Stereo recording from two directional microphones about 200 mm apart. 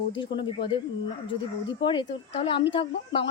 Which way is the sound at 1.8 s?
25° left (ahead or behind).